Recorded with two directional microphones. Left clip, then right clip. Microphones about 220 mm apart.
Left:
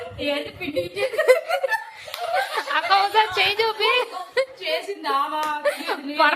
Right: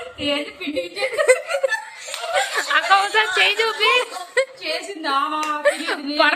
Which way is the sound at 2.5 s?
5° left (ahead or behind).